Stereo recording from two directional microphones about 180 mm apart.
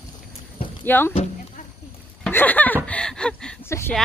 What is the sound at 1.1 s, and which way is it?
Sheep, 35° left (ahead or behind).